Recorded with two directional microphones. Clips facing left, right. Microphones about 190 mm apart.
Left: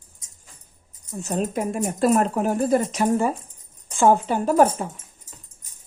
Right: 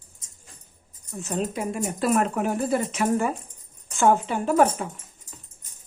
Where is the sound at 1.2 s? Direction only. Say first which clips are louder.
Left 3 dB; 45° left (ahead or behind).